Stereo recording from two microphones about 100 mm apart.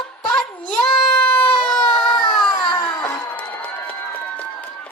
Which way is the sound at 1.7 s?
10° left (ahead or behind).